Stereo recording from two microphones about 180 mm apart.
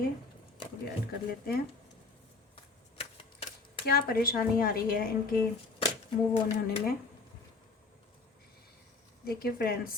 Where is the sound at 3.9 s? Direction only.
55° left (ahead or behind).